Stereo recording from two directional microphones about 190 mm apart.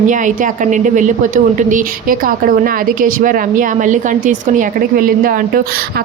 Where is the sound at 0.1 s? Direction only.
40° right (ahead or behind).